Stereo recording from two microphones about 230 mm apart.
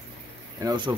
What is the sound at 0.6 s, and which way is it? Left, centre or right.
Speech, centre.